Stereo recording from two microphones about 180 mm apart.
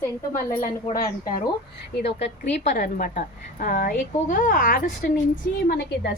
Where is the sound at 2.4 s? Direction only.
40° left (ahead or behind).